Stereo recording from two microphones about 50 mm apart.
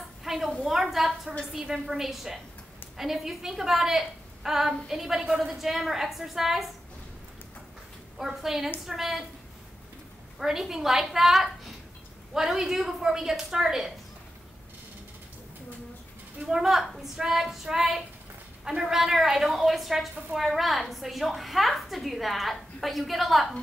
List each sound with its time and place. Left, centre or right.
0.2 s a sound: centre
0.6 s a woman's voice: centre
5.3 s a woman's voice: centre
5.6 s a woman's voice: centre
8.2 s a woman's voice: centre
10.4 s a woman's voice: centre
16.4 s a woman's voice: centre